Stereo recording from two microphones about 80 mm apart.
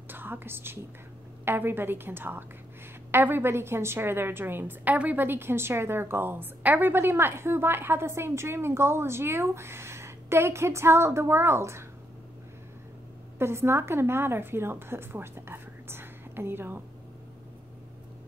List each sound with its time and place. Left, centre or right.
0.1 s a woman's voice: right
13.4 s a woman's voice: right